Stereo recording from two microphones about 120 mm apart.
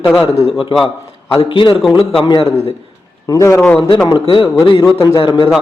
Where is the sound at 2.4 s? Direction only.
55° left (ahead or behind).